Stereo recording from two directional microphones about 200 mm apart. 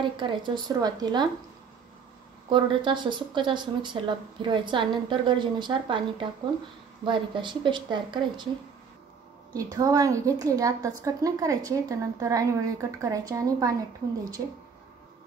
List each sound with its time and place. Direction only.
0.0 s speech: 25° right (ahead or behind)
2.5 s speech: 25° right (ahead or behind)
9.5 s a woman's voice: 20° right (ahead or behind)